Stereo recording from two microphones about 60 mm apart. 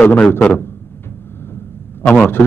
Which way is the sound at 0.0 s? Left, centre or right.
Left.